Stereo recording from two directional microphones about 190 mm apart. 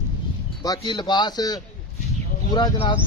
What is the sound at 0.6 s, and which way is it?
Speech, 20° left (ahead or behind).